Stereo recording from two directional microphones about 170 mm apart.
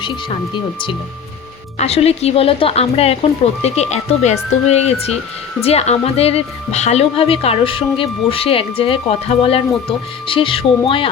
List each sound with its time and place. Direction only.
0.0 s speech: 30° left (ahead or behind)